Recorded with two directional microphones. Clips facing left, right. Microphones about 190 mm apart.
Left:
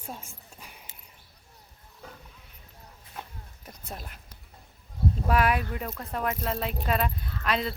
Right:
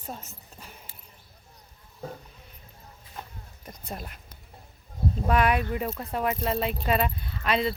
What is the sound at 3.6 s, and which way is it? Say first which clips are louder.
Speech: right 3 dB; centre (ahead or behind).